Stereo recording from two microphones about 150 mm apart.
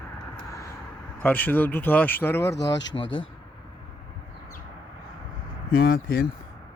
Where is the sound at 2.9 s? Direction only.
40° left (ahead or behind).